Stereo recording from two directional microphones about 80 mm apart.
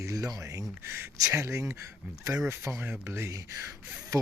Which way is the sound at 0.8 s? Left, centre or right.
Right.